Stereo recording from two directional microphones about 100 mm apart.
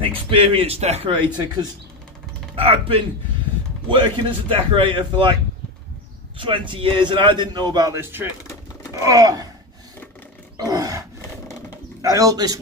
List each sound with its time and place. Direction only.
0.0 s a man's voice: 60° right (ahead or behind)
2.5 s speech: 70° right (ahead or behind)
3.9 s a man's voice: 55° right (ahead or behind)
7.9 s speech: 20° right (ahead or behind)
8.9 s a sound: 35° right (ahead or behind)
10.6 s roar: 40° right (ahead or behind)
12.0 s a sound: 35° right (ahead or behind)